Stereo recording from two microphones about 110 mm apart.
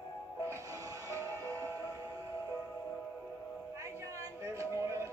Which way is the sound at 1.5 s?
20° left (ahead or behind).